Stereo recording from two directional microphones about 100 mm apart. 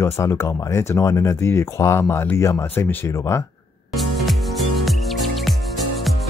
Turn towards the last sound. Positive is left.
turn(degrees=0)  # may be behind; listen again after turning